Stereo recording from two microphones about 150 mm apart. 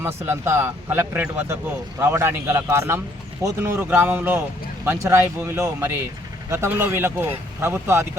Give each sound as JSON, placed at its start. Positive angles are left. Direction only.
{"t": 0.0, "sound": "speech", "side_deg": -15}